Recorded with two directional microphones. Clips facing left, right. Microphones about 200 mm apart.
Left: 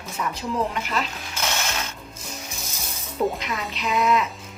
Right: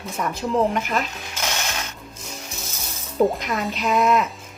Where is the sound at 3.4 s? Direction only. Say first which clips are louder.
Right 5 dB; 50° right (ahead or behind).